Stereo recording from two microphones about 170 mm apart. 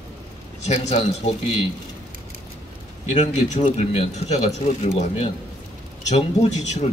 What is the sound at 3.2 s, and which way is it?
A man's voice, 40° left (ahead or behind).